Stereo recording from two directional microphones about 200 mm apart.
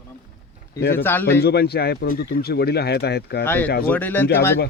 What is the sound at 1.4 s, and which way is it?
Speech, 50° left (ahead or behind).